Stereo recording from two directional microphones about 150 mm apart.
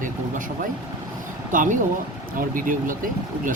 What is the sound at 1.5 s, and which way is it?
Speech, 60° right (ahead or behind).